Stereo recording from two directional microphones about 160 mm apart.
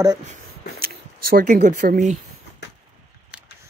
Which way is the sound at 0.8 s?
65° right (ahead or behind).